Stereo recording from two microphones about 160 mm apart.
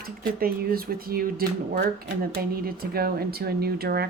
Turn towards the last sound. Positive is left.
turn(degrees=-80)